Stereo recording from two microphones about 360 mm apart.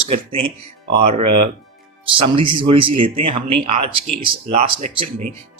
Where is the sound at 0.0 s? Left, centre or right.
Centre.